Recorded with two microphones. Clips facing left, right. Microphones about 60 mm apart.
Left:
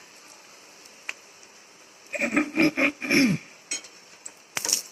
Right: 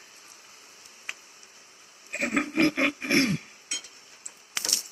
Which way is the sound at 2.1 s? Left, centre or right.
Left.